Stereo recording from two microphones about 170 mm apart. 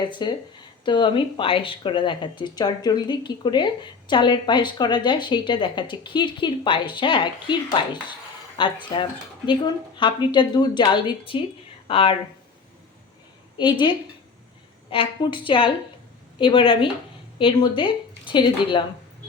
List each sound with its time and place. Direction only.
0.0 s speech: 25° left (ahead or behind)
13.6 s a woman's voice: 25° left (ahead or behind)